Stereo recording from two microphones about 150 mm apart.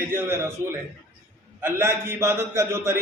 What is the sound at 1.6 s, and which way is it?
A man's voice, 15° right (ahead or behind).